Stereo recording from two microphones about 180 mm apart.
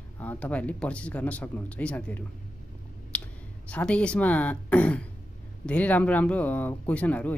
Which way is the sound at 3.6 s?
5° left (ahead or behind).